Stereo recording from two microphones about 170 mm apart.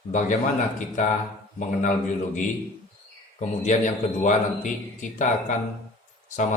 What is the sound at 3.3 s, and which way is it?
A man's voice, 45° left (ahead or behind).